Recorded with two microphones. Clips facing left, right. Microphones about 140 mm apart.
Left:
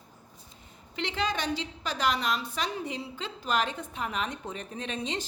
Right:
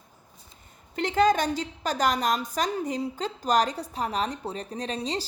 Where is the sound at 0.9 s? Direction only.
45° right (ahead or behind).